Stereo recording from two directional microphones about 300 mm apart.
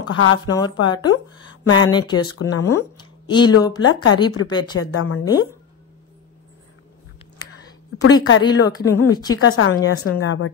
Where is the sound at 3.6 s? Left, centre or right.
Centre.